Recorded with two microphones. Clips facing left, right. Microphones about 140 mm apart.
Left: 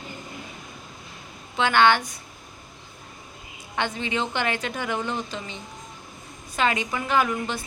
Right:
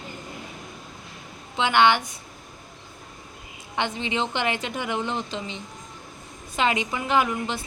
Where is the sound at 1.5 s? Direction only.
20° right (ahead or behind).